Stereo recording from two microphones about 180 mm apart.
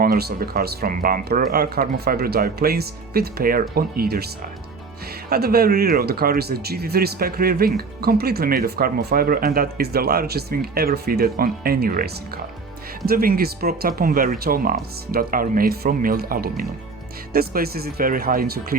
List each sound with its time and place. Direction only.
0.0 s speech: 55° right (ahead or behind)
5.3 s speech: 55° right (ahead or behind)